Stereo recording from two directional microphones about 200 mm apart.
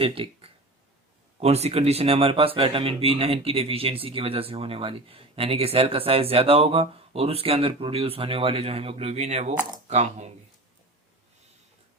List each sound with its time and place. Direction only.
0.0 s speech: 30° right (ahead or behind)